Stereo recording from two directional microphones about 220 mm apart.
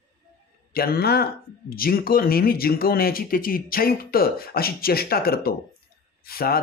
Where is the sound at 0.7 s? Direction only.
45° left (ahead or behind).